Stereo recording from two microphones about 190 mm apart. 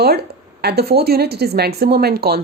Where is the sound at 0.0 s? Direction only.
55° right (ahead or behind).